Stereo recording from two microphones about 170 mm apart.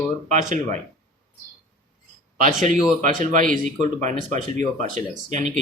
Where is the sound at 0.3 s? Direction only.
45° right (ahead or behind).